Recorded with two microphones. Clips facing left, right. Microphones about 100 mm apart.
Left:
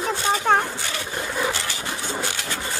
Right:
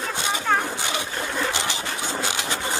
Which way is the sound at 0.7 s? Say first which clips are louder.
Right 3 dB; 20° right (ahead or behind).